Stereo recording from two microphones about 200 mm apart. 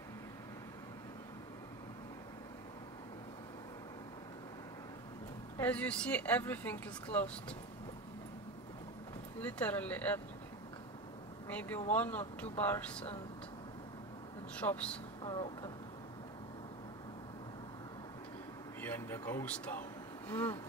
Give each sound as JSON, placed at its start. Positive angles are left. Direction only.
{"t": 5.6, "sound": "speech", "side_deg": 5}
{"t": 9.4, "sound": "speech", "side_deg": 5}
{"t": 11.4, "sound": "speech", "side_deg": 10}
{"t": 14.6, "sound": "speech", "side_deg": 5}
{"t": 15.2, "sound": "speech", "side_deg": 20}
{"t": 18.8, "sound": "speech", "side_deg": 10}
{"t": 20.2, "sound": "a sound", "side_deg": 10}